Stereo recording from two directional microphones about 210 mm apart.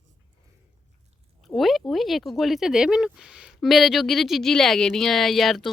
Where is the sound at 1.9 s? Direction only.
Centre (ahead or behind).